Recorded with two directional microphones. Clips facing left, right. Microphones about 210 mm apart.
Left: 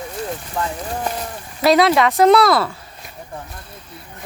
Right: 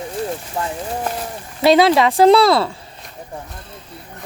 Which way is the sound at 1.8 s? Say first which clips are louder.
Right 1 dB; 30° right (ahead or behind).